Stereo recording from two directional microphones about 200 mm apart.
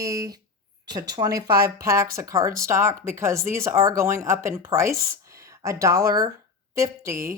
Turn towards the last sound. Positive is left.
turn(degrees=-15)  # may be behind; listen again after turning